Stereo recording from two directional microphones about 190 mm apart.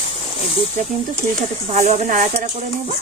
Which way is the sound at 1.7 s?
40° right (ahead or behind).